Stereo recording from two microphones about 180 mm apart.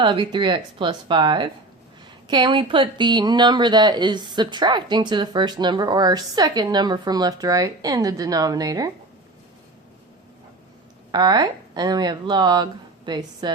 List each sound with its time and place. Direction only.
0.0 s speech: 25° right (ahead or behind)
11.1 s speech: 25° right (ahead or behind)